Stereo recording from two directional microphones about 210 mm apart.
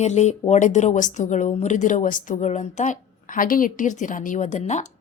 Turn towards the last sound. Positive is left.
turn(degrees=35)  # may be behind; listen again after turning